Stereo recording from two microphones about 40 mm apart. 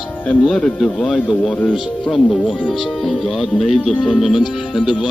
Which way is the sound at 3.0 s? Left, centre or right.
Centre.